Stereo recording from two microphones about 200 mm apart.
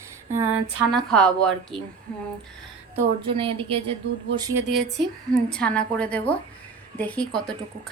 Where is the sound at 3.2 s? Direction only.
25° right (ahead or behind).